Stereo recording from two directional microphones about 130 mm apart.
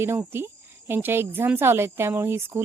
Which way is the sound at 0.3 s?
20° right (ahead or behind).